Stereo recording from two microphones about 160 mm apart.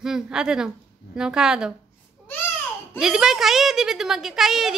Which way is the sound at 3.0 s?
5° right (ahead or behind).